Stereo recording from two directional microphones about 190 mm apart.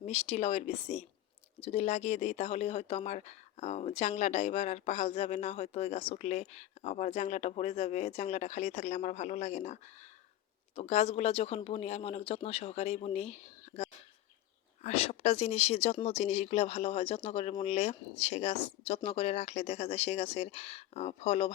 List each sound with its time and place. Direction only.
0.0 s speech: 35° left (ahead or behind)